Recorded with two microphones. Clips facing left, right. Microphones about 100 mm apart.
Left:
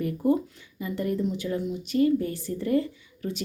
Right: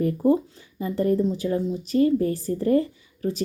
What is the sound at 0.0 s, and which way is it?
Speech, 30° right (ahead or behind).